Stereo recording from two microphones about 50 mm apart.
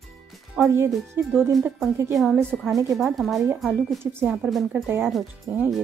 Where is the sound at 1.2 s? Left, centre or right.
Right.